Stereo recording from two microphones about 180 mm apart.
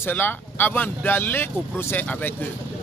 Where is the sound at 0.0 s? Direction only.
10° left (ahead or behind).